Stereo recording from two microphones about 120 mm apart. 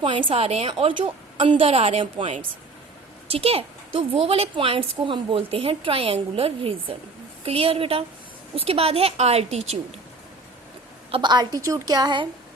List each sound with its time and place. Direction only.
0.0 s a woman's voice: 45° right (ahead or behind)
0.7 s a woman's voice: 45° right (ahead or behind); by 10.0 s 65° right (ahead or behind)
11.1 s a woman's voice: 40° right (ahead or behind)